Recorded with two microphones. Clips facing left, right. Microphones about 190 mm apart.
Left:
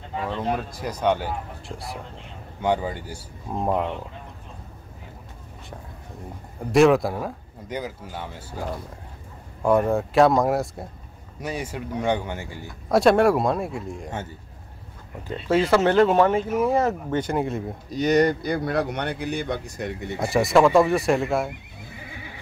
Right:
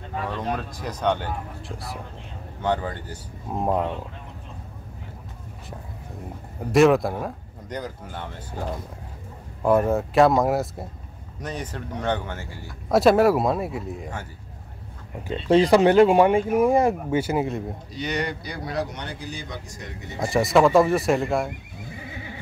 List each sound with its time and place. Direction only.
0.1 s speech: 10° left (ahead or behind)
2.6 s speech: 10° left (ahead or behind)
3.4 s speech: 5° right (ahead or behind)
6.6 s speech: centre (ahead or behind)
11.4 s speech: 10° left (ahead or behind)
12.8 s speech: centre (ahead or behind)
15.7 s speech: 15° right (ahead or behind)
17.8 s speech: 45° left (ahead or behind); by 19.9 s 60° left (ahead or behind)
20.2 s speech: centre (ahead or behind)